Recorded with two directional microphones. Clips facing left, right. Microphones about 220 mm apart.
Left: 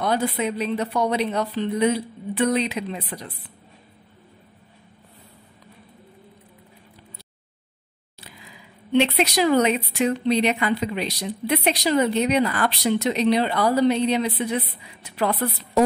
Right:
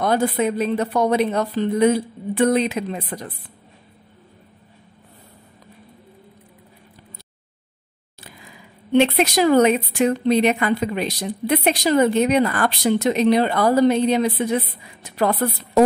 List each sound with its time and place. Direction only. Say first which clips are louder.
0.0 s speech: right 4 dB; 45° right (ahead or behind)
8.2 s speech: right 2 dB; 50° right (ahead or behind)